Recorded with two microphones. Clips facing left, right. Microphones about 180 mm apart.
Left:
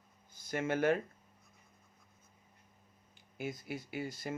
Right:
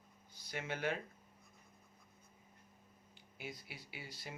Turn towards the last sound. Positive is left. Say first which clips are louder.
# left 11 dB
turn(degrees=50)  # may be behind; listen again after turning